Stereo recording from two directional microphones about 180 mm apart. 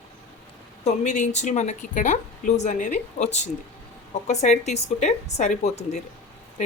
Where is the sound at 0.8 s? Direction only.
40° left (ahead or behind).